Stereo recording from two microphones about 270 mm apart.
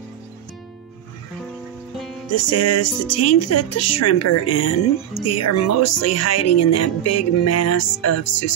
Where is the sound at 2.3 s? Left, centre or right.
Left.